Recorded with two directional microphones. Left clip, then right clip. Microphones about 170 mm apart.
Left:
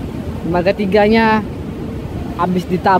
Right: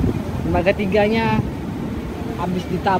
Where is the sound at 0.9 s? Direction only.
35° left (ahead or behind).